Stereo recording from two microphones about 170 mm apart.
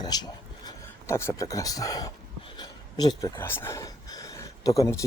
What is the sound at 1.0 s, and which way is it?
Speech, 15° left (ahead or behind).